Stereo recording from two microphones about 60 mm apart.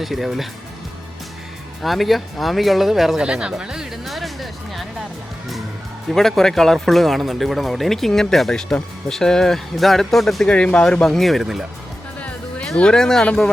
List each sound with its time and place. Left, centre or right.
0.0 s speech: centre
1.8 s speech: centre
3.2 s speech: centre
4.1 s music: centre
6.1 s speech: centre
10.5 s speech: centre
11.0 s speech: centre
12.6 s speech: centre